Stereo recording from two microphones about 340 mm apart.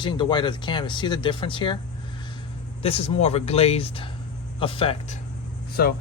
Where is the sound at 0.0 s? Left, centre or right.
Centre.